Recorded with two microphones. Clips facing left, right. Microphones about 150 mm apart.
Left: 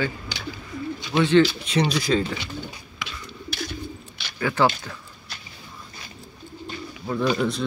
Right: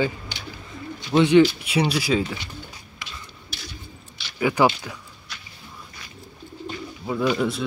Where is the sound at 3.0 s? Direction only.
60° left (ahead or behind).